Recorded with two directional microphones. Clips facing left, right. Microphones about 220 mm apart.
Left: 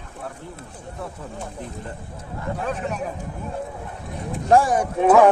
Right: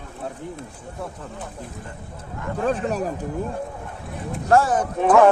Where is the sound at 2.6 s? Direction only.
35° right (ahead or behind).